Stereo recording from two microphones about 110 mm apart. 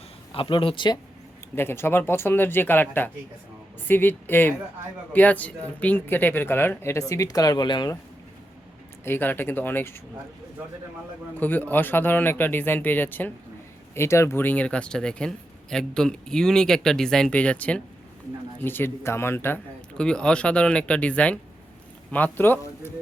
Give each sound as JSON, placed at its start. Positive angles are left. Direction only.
{"t": 0.3, "sound": "speech", "side_deg": 50}
{"t": 1.5, "sound": "speech", "side_deg": 20}
{"t": 9.0, "sound": "speech", "side_deg": 20}
{"t": 11.3, "sound": "speech", "side_deg": 15}
{"t": 20.0, "sound": "speech", "side_deg": 10}